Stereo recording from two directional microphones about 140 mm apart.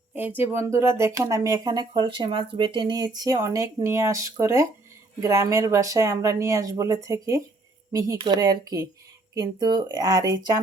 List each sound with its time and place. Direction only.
0.1 s speech: 15° right (ahead or behind)